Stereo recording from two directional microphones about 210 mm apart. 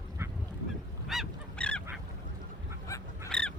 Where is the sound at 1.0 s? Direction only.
Centre (ahead or behind).